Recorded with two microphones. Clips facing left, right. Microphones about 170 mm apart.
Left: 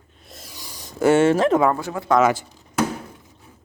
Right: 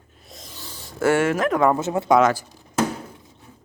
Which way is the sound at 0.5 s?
15° left (ahead or behind).